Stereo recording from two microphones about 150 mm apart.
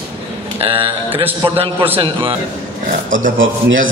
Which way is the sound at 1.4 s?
35° right (ahead or behind).